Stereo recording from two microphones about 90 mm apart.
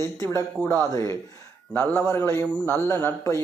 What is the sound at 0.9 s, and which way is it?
Speech, 35° left (ahead or behind).